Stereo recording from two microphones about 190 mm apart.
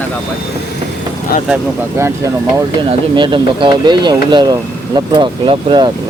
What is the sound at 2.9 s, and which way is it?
Speech, 25° right (ahead or behind).